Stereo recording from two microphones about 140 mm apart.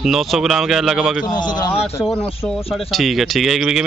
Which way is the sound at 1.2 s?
30° left (ahead or behind).